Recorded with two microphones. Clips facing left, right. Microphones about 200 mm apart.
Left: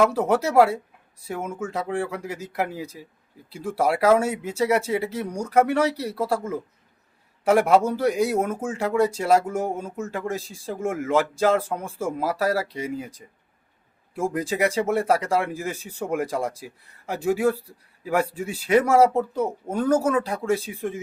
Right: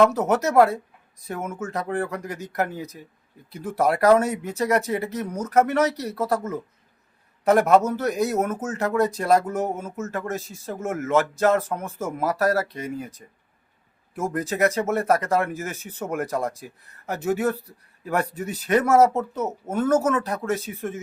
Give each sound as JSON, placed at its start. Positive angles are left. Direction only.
{"t": 0.3, "sound": "speech", "side_deg": 10}